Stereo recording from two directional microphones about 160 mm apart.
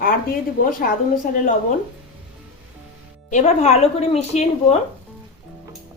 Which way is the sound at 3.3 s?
45° left (ahead or behind).